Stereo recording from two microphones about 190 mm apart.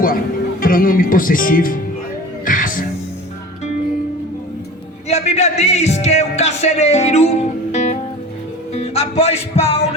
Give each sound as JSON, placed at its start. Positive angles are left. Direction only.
{"t": 0.6, "sound": "speech", "side_deg": 50}
{"t": 2.4, "sound": "music", "side_deg": 45}
{"t": 5.0, "sound": "music", "side_deg": 35}